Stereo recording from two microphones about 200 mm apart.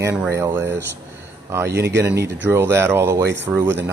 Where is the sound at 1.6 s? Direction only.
55° right (ahead or behind).